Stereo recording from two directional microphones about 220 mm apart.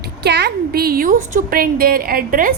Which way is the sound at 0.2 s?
50° right (ahead or behind).